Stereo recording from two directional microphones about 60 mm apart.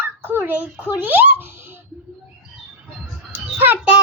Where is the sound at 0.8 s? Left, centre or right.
Right.